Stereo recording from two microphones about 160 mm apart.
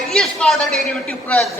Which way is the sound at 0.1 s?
5° left (ahead or behind).